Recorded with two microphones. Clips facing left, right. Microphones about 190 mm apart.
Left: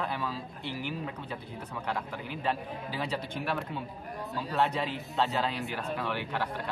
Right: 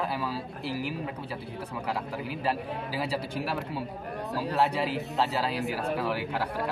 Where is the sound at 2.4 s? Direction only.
10° right (ahead or behind).